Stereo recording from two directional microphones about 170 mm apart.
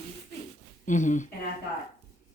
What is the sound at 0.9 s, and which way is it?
Speech, 45° left (ahead or behind).